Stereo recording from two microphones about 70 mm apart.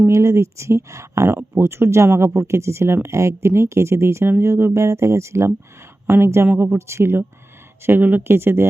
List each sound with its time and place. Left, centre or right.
0.1 s speech: right